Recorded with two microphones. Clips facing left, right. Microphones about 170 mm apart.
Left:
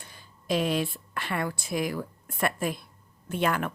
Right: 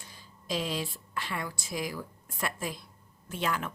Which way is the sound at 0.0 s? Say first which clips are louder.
Left 2 dB; 60° left (ahead or behind).